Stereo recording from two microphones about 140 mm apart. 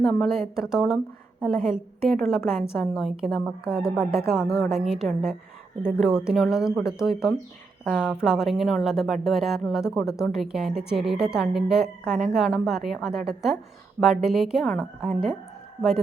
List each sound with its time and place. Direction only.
0.0 s a woman's voice: centre (ahead or behind)
7.9 s a woman's voice: 10° left (ahead or behind)
8.1 s a woman's voice: 5° right (ahead or behind)